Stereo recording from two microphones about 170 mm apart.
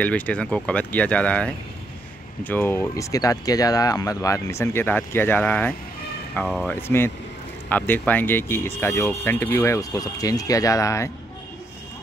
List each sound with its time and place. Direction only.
0.0 s speech: 10° left (ahead or behind)